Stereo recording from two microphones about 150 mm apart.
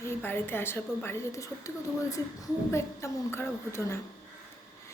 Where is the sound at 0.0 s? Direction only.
15° left (ahead or behind).